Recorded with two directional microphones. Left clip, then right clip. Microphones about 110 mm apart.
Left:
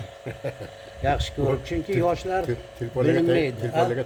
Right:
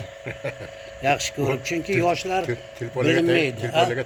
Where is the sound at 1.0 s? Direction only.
90° right.